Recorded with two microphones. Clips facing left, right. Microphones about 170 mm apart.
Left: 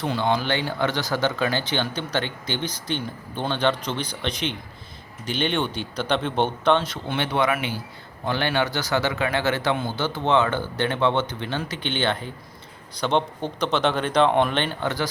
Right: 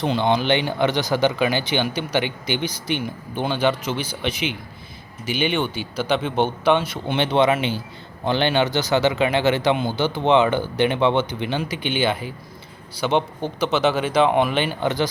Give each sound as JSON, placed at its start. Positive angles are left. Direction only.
{"t": 0.0, "sound": "speech", "side_deg": -20}
{"t": 7.1, "sound": "speech", "side_deg": -20}